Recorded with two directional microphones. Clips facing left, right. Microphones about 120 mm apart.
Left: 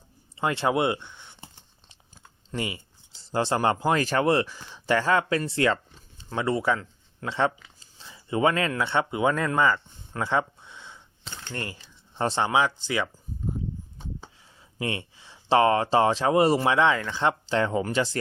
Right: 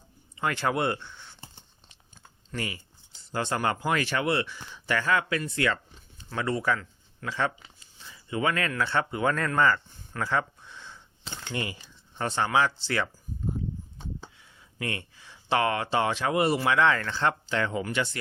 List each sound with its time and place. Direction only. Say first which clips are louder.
0.3 s speech: left 3 dB; 25° left (ahead or behind)
2.5 s speech: left 3 dB; 20° left (ahead or behind)
5.5 s a sound: left 4 dB; 30° left (ahead or behind)
6.3 s speech: left 3 dB; 25° left (ahead or behind)
10.1 s a sound: left 3 dB; 20° left (ahead or behind)
11.3 s typewriter: right 2 dB; 5° right (ahead or behind)
12.1 s speech: left 2 dB; 25° left (ahead or behind)
14.8 s speech: left 4 dB; 25° left (ahead or behind)
17.5 s speech: left 4 dB; 30° left (ahead or behind)